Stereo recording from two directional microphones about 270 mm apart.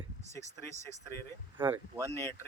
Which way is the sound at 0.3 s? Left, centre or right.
Centre.